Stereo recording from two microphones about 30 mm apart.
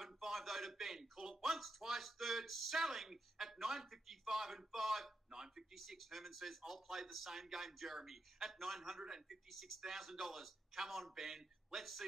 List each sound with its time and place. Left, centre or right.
0.0 s a sound: centre
3.3 s a man's voice: centre
5.3 s speech: centre
5.8 s a man's voice: centre
9.5 s speech: centre